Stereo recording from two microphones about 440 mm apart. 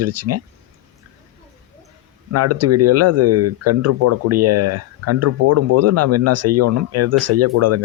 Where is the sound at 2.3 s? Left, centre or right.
Right.